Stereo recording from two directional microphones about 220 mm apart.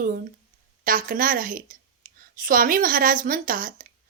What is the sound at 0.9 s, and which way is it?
A woman's voice, 40° right (ahead or behind).